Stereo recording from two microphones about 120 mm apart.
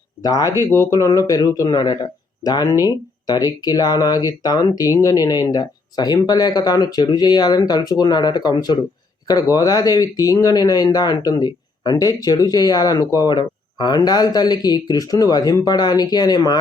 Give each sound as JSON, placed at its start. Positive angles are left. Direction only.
{"t": 0.2, "sound": "speech", "side_deg": 30}